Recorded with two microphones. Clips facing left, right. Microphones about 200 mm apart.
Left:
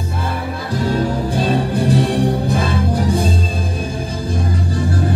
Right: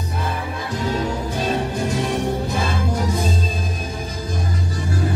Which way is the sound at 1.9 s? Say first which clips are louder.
Left 7 dB; 35° left (ahead or behind).